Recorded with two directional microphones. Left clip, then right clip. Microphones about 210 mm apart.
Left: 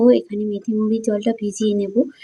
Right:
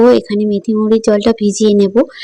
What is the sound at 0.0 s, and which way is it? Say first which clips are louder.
A woman's voice: right 6 dB; 40° right (ahead or behind).